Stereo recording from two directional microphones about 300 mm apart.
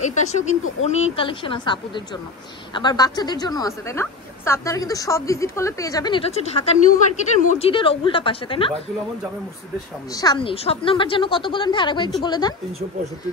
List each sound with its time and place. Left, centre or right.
0.0 s a woman's voice: left
10.1 s a woman's voice: centre